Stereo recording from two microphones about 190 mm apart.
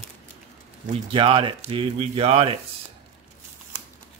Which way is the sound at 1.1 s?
25° right (ahead or behind).